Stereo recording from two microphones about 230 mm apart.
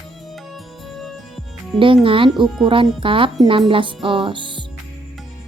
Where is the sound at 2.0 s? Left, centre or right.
Right.